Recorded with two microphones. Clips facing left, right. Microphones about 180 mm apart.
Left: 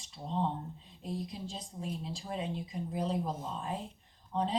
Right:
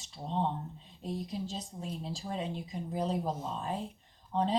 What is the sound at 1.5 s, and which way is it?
Speech, 35° right (ahead or behind).